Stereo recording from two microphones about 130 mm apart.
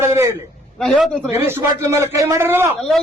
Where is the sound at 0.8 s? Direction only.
Centre (ahead or behind).